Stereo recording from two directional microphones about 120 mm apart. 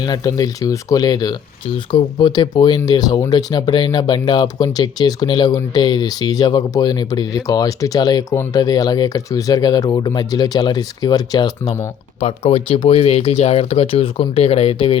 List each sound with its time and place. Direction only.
0.0 s speech: 35° left (ahead or behind)
12.2 s speech: 55° left (ahead or behind)